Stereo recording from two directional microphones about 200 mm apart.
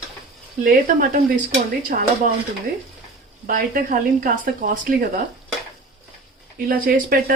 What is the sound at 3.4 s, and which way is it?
Speech, 45° right (ahead or behind).